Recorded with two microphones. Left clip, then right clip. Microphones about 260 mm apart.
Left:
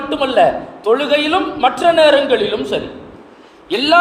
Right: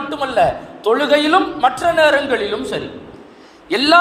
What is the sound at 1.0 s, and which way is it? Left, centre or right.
Speech, right.